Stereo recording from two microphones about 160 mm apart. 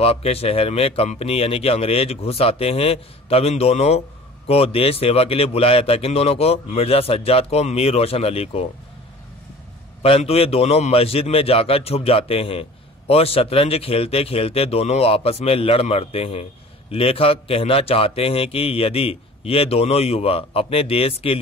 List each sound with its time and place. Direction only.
0.0 s a man's voice: 40° left (ahead or behind)
10.0 s a man's voice: 40° left (ahead or behind)